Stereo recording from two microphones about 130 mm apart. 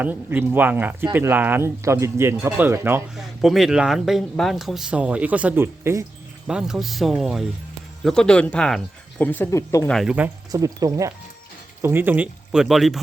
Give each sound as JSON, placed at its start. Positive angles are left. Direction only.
{"t": 0.0, "sound": "speech", "side_deg": -15}
{"t": 3.2, "sound": "speech", "side_deg": 0}
{"t": 6.5, "sound": "speech", "side_deg": -5}
{"t": 9.8, "sound": "speech", "side_deg": 5}
{"t": 10.1, "sound": "speech", "side_deg": -10}
{"t": 10.5, "sound": "speech", "side_deg": -25}